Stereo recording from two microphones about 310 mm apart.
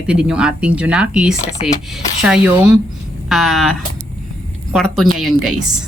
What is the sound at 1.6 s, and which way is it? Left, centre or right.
Speech, centre.